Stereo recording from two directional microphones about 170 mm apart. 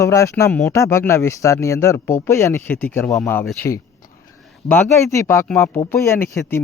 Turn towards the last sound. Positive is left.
turn(degrees=15)  # may be behind; listen again after turning